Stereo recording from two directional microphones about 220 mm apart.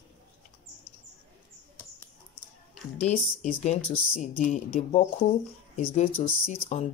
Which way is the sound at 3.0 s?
30° left (ahead or behind).